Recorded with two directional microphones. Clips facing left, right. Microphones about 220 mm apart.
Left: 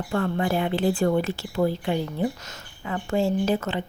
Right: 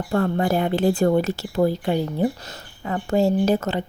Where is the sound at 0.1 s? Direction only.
40° right (ahead or behind).